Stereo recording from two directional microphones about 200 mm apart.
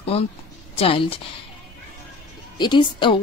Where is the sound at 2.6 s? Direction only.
25° left (ahead or behind).